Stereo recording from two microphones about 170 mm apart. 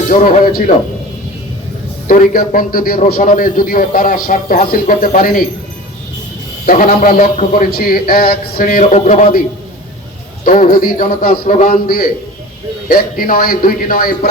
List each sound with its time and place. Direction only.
0.1 s a man's voice: 55° left (ahead or behind)
2.0 s a man's voice: 55° left (ahead or behind)
6.7 s a man's voice: 55° left (ahead or behind)
10.4 s a man's voice: 55° left (ahead or behind)